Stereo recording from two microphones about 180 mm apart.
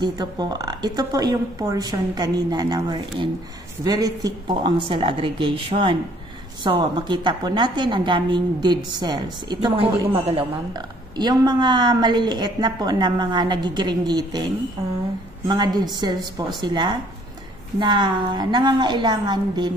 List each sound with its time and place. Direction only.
0.0 s a woman's voice: 25° right (ahead or behind)